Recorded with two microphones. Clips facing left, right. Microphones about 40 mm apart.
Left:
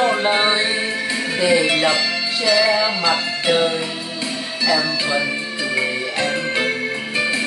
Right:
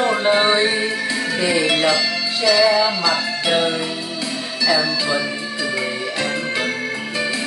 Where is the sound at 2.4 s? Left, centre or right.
Centre.